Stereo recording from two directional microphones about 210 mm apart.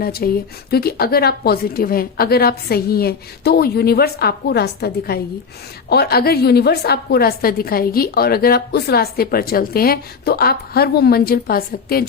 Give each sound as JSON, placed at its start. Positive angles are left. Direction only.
{"t": 0.0, "sound": "a woman's voice", "side_deg": 45}